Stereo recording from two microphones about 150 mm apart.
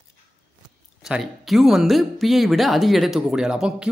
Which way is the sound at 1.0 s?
5° right (ahead or behind).